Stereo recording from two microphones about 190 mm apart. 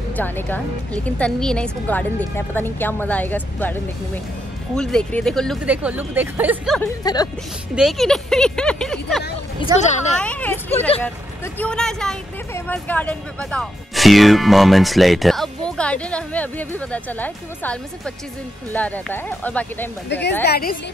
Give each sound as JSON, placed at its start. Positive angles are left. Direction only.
{"t": 0.1, "sound": "a woman's voice", "side_deg": 10}
{"t": 6.8, "sound": "speech", "side_deg": 20}
{"t": 7.7, "sound": "speech", "side_deg": 0}
{"t": 9.8, "sound": "speech", "side_deg": 35}
{"t": 10.1, "sound": "a woman's voice", "side_deg": 5}
{"t": 20.1, "sound": "a woman's voice", "side_deg": 65}